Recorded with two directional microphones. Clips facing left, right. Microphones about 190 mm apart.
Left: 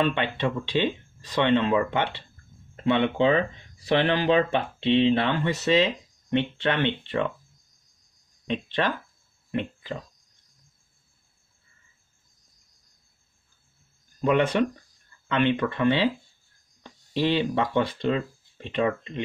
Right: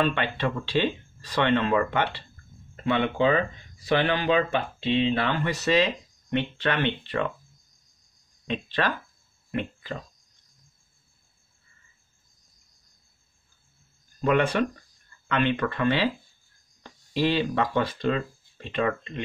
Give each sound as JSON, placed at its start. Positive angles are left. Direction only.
{"t": 0.0, "sound": "speech", "side_deg": 20}
{"t": 8.5, "sound": "speech", "side_deg": 20}
{"t": 9.5, "sound": "a sound", "side_deg": 25}
{"t": 14.2, "sound": "speech", "side_deg": 20}